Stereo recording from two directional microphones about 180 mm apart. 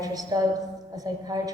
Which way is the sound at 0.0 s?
20° right (ahead or behind).